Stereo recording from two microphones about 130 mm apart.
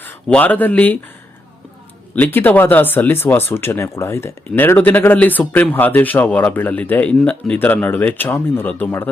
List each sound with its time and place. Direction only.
0.0 s speech: 10° left (ahead or behind)
2.1 s speech: 15° left (ahead or behind)